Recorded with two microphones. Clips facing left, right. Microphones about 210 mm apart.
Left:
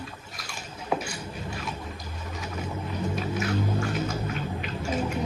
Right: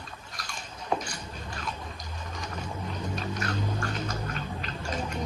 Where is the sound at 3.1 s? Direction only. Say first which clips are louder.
Left 5 dB; 5° left (ahead or behind).